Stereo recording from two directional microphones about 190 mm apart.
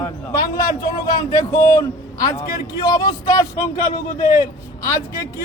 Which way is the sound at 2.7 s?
20° left (ahead or behind).